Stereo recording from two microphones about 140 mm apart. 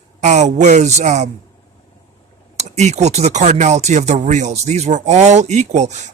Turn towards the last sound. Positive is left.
turn(degrees=-55)  # may be behind; listen again after turning